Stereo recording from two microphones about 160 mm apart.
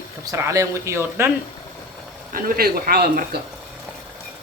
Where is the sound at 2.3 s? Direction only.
70° right (ahead or behind).